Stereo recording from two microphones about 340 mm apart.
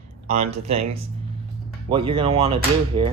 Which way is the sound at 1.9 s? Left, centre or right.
Centre.